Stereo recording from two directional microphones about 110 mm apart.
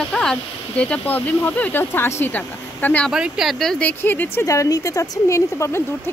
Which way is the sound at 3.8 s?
15° left (ahead or behind).